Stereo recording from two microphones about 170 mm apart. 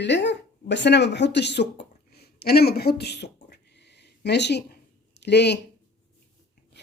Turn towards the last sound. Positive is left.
turn(degrees=80)